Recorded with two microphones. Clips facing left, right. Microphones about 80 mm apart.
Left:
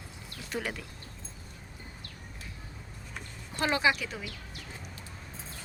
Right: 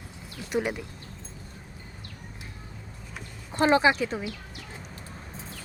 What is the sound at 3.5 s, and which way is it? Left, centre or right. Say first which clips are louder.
Speech: right 7 dB; right.